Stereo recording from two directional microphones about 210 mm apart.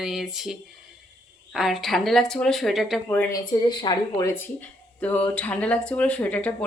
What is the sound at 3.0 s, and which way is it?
Speech, 15° left (ahead or behind).